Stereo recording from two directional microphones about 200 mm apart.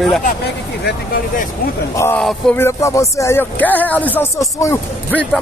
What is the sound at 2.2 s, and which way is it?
Speech, 5° left (ahead or behind).